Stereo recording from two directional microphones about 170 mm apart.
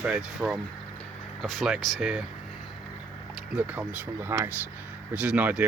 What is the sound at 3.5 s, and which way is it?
Speech, 10° right (ahead or behind).